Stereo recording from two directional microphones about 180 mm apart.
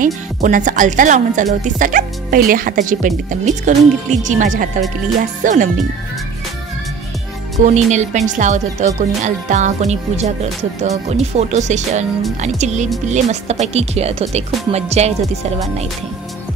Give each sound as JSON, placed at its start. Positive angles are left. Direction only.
{"t": 0.0, "sound": "speech", "side_deg": -45}
{"t": 7.6, "sound": "speech", "side_deg": -40}